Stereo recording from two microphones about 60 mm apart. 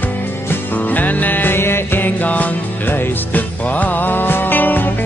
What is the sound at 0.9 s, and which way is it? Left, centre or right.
Music, left.